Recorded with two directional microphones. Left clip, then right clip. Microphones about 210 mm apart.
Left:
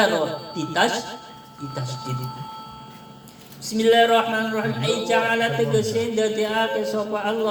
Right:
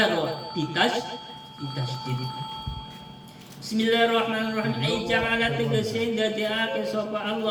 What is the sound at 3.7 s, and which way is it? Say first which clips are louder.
Speech: left 6 dB; 55° left (ahead or behind).